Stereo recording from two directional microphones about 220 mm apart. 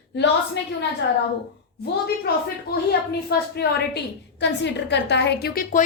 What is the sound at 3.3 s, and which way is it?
A woman's voice, 45° left (ahead or behind).